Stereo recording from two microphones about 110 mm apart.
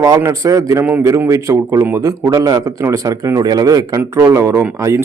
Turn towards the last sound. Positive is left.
turn(degrees=-25)  # may be behind; listen again after turning